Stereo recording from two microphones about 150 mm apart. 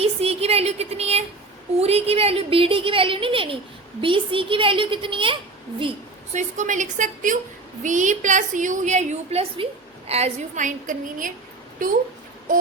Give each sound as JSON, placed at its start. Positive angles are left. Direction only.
{"t": 0.0, "sound": "a woman's voice", "side_deg": -45}
{"t": 6.3, "sound": "a woman's voice", "side_deg": -55}